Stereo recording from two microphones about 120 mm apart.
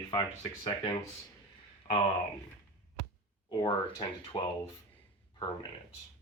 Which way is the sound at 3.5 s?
30° left (ahead or behind).